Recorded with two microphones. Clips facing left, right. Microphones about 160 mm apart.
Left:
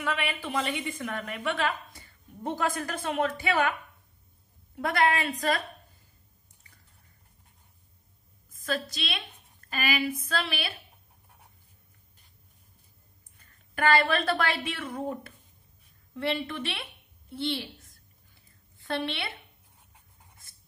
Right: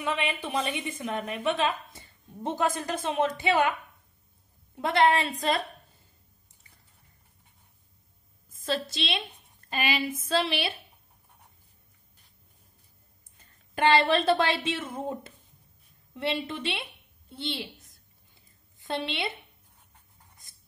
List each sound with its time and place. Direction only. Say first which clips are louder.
0.0 s a woman's voice: right 1 dB; 20° right (ahead or behind)
4.8 s a woman's voice: right 3 dB; 25° right (ahead or behind)
8.6 s a woman's voice: right 2 dB; 25° right (ahead or behind)
13.7 s a woman's voice: right 2 dB; 25° right (ahead or behind)
18.8 s a woman's voice: even; 20° right (ahead or behind)